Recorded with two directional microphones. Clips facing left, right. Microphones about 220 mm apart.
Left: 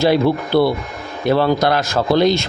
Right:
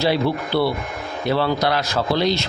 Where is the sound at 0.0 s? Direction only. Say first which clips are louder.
Left 5 dB; 50° left (ahead or behind).